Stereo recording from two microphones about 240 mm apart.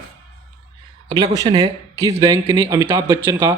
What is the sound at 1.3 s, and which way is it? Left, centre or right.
Speech, centre.